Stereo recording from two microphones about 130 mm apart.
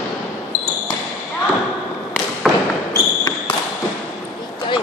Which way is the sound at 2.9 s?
20° left (ahead or behind).